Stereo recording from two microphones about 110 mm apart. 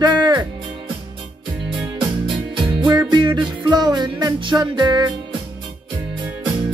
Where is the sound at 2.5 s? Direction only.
40° right (ahead or behind).